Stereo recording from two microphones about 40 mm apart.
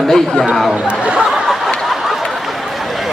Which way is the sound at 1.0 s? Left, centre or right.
Right.